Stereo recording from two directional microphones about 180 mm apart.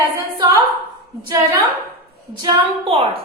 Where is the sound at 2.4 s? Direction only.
30° right (ahead or behind).